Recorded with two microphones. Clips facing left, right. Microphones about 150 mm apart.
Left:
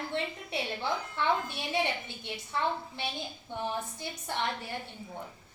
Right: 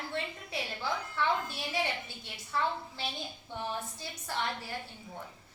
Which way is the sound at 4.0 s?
20° left (ahead or behind).